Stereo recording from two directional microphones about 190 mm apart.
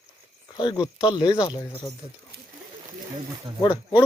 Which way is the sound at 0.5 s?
20° left (ahead or behind).